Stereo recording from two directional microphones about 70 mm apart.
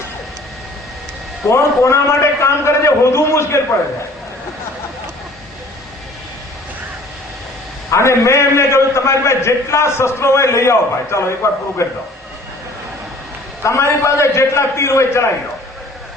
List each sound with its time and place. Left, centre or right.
1.5 s a man's voice: left
7.9 s a man's voice: left
13.6 s a man's voice: left